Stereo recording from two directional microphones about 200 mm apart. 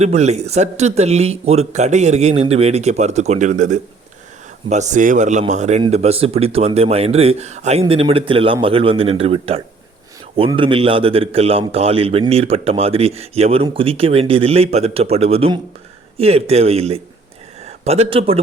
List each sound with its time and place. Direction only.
0.0 s a man's voice: 35° right (ahead or behind)